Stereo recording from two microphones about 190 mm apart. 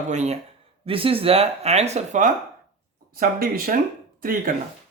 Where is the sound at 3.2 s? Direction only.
50° right (ahead or behind).